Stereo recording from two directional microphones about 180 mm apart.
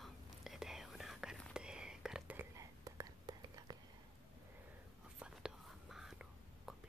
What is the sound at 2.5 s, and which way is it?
Whispering, 20° right (ahead or behind).